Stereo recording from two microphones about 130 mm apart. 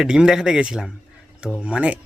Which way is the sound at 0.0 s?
5° right (ahead or behind).